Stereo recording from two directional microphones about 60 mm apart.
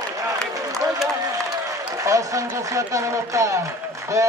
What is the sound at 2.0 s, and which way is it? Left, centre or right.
Speech, right.